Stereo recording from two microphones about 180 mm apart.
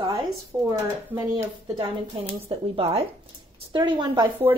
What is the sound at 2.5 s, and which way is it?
A woman's voice, 35° right (ahead or behind).